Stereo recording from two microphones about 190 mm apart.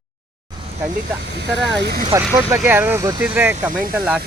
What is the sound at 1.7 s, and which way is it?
Speech, 60° right (ahead or behind).